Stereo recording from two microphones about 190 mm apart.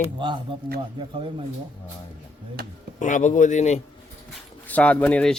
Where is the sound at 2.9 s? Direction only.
40° left (ahead or behind).